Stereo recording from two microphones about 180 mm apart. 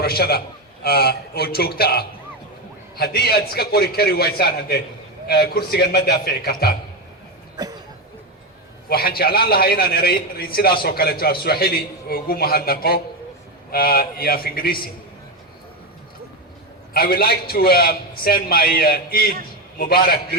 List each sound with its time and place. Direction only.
0.0 s a man's voice: 60° left (ahead or behind)
7.5 s a sound: 20° right (ahead or behind)
8.9 s a man's voice: 60° left (ahead or behind)
16.9 s a man's voice: 55° left (ahead or behind)